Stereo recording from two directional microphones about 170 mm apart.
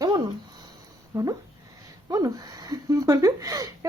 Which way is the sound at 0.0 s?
25° right (ahead or behind).